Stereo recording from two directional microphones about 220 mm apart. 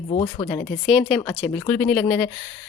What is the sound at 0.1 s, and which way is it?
Speech, 25° left (ahead or behind).